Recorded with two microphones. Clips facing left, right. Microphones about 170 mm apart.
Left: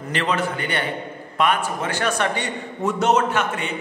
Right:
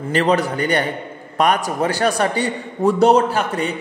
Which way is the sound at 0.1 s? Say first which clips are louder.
Right 6 dB; 40° right (ahead or behind).